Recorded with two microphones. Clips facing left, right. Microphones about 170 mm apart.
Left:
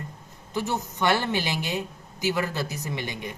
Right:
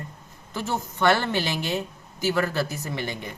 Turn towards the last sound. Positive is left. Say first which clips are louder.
# right 1 dB
turn(degrees=15)  # may be behind; listen again after turning